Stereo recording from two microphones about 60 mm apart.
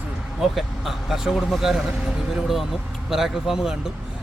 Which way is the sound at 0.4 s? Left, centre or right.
Centre.